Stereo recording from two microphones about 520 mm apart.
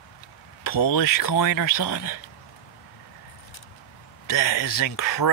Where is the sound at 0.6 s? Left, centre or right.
Left.